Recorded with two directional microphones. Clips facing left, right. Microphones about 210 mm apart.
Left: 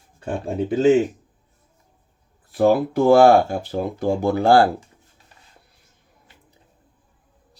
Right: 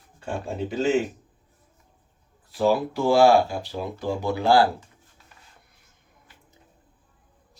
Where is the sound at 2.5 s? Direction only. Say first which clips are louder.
Left 5 dB; 50° left (ahead or behind).